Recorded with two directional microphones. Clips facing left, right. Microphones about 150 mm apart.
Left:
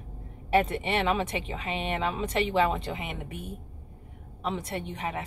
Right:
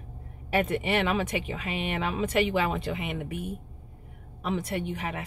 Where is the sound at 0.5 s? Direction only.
30° left (ahead or behind).